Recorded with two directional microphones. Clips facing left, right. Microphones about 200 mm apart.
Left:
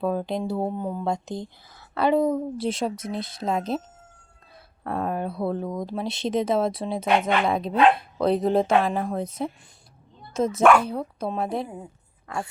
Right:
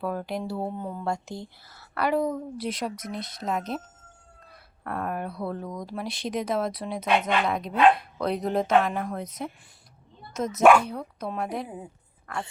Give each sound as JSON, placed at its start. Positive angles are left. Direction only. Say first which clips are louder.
{"t": 0.0, "sound": "speech", "louder": "left 4 dB", "side_deg": 20}
{"t": 4.8, "sound": "speech", "louder": "left 4 dB", "side_deg": 25}